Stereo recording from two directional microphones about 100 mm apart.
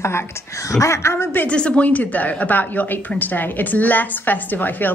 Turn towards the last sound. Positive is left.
turn(degrees=20)  # may be behind; listen again after turning